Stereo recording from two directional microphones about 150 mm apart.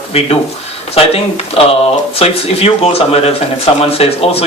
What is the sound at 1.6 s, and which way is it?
Speech, 40° left (ahead or behind).